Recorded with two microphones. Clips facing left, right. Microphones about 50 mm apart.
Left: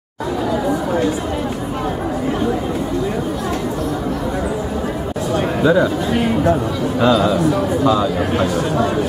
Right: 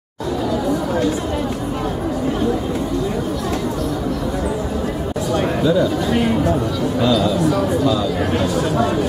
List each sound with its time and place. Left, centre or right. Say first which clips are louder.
5.6 s speech: left 3 dB; left
6.1 s a man's voice: left 2 dB; centre
7.0 s speech: left 3 dB; left
7.3 s a man's voice: left 1 dB; centre
7.8 s speech: left 3 dB; left
8.2 s a man's voice: left 1 dB; centre